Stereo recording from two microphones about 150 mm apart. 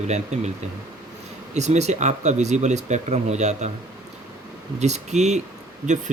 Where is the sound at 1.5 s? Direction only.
50° right (ahead or behind).